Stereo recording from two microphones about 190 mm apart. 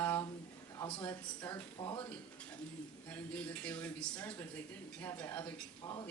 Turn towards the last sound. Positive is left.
turn(degrees=10)  # may be behind; listen again after turning